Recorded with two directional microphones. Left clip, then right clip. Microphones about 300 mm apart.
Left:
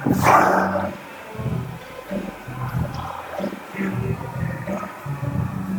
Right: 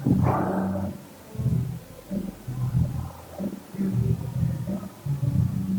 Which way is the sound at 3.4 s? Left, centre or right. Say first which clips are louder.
Left 3 dB; centre.